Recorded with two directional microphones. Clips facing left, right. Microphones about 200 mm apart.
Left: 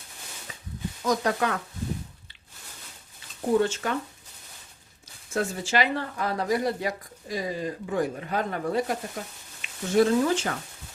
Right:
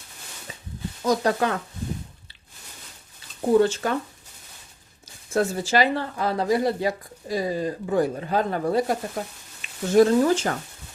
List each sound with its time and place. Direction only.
1.0 s speech: 30° right (ahead or behind)
3.6 s speech: 35° right (ahead or behind)
5.3 s speech: 35° right (ahead or behind)